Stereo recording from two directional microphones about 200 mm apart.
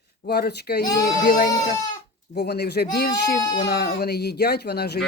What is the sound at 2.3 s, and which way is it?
Speech, 55° left (ahead or behind).